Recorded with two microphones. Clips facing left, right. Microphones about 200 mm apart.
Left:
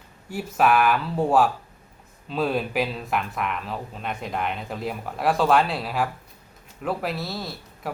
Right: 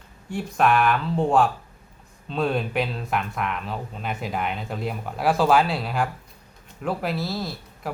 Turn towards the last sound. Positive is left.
turn(degrees=0)  # may be behind; listen again after turning